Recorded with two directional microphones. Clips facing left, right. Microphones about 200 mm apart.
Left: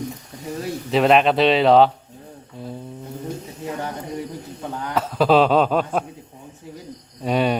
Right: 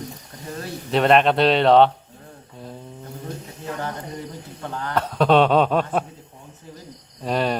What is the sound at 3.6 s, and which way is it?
Speech, 10° left (ahead or behind).